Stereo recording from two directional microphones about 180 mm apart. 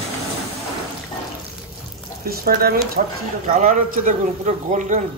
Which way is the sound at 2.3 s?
55° right (ahead or behind).